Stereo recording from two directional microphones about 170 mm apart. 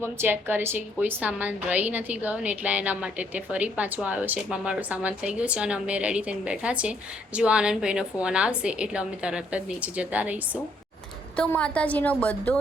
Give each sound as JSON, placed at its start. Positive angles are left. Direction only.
{"t": 0.0, "sound": "a woman's voice", "side_deg": -15}
{"t": 11.3, "sound": "a woman's voice", "side_deg": 5}